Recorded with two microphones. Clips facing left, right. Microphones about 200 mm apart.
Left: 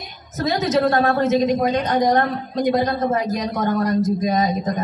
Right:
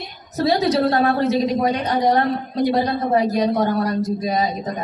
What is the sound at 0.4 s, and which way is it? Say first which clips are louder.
A woman's voice: right 1 dB; 35° right (ahead or behind).